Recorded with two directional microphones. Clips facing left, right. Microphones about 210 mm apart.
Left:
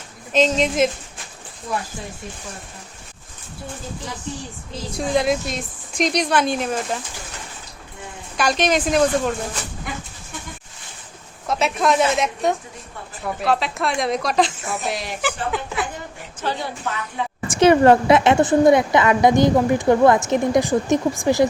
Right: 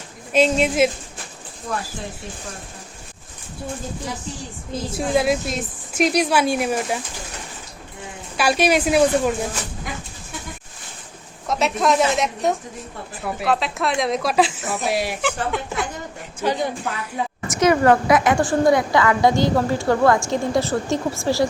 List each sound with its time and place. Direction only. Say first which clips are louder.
0.3 s speech: right 1 dB; 5° right (ahead or behind)
4.9 s speech: even; 5° right (ahead or behind)
8.4 s speech: right 1 dB; 10° right (ahead or behind)
11.4 s a woman's voice: even; centre (ahead or behind)
16.4 s speech: right 4 dB; 15° right (ahead or behind)
17.5 s a woman's voice: left 3 dB; 30° left (ahead or behind)